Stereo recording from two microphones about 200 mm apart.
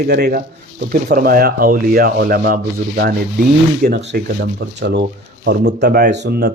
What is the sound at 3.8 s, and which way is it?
A man's voice, 50° right (ahead or behind).